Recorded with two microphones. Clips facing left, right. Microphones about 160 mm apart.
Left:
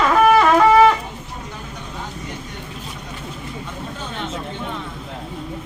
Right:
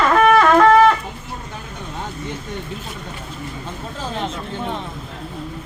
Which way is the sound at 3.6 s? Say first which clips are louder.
Right 2 dB; 30° right (ahead or behind).